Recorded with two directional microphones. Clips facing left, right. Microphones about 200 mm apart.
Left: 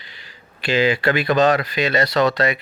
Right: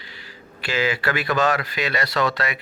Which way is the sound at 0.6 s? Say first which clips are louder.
Left 5 dB; 25° left (ahead or behind).